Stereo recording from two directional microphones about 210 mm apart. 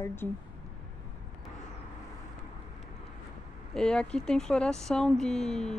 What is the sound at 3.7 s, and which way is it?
Speech, 5° left (ahead or behind).